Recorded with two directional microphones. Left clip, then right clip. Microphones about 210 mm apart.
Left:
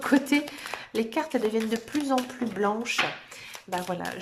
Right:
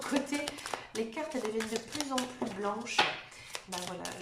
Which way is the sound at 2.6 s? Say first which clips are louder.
Left 4 dB; 45° left (ahead or behind).